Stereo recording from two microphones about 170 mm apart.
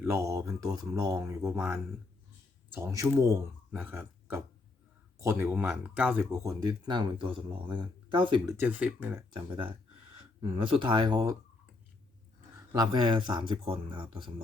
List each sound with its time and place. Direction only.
0.0 s speech: 15° right (ahead or behind)
8.5 s speech: 10° right (ahead or behind)
9.3 s speech: 30° right (ahead or behind)
12.7 s speech: 25° right (ahead or behind)